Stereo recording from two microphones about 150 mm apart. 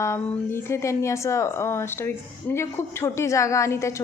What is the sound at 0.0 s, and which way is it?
A woman's voice, 20° left (ahead or behind).